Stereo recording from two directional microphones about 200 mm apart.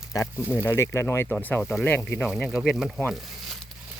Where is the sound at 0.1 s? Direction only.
15° left (ahead or behind).